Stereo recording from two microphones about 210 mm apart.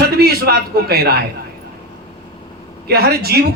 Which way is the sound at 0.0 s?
50° right (ahead or behind).